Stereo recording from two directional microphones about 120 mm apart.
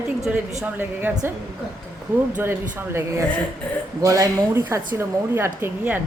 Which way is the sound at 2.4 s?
20° right (ahead or behind).